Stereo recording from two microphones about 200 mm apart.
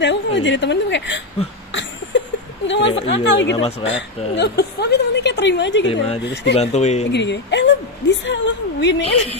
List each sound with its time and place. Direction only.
0.0 s a woman's voice: 65° left (ahead or behind)
1.7 s a sound: 65° left (ahead or behind)
2.8 s a woman's voice: 30° left (ahead or behind)
3.1 s a woman's voice: 60° left (ahead or behind)
6.5 s speech: 35° left (ahead or behind)
7.1 s a sound: 60° left (ahead or behind)